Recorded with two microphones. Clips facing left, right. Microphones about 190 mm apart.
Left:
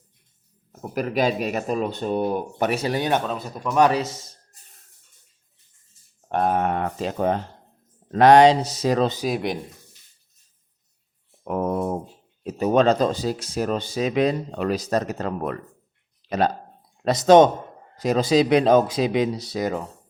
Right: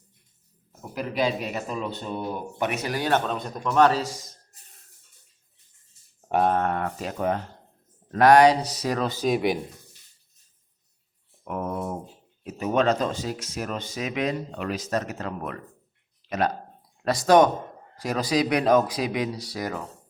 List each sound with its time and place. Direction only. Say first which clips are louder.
0.8 s speech: left 4 dB; 45° left (ahead or behind)
2.6 s speech: left 3 dB; 35° left (ahead or behind)
3.1 s speech: left 1 dB; 5° left (ahead or behind)
6.2 s speech: even; 5° right (ahead or behind)
6.5 s speech: left 2 dB; 15° left (ahead or behind)
9.2 s speech: right 2 dB; centre (ahead or behind)
11.4 s a sound: left 6 dB; 35° left (ahead or behind)
12.4 s speech: left 5 dB; 35° left (ahead or behind)
16.2 s a sound: left 4 dB; 35° left (ahead or behind)
17.0 s speech: left 4 dB; 20° left (ahead or behind)